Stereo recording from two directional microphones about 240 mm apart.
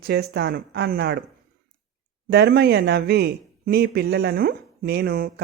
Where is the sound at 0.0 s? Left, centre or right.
Right.